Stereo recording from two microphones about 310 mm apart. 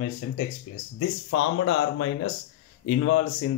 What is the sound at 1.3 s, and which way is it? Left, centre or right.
Speech, left.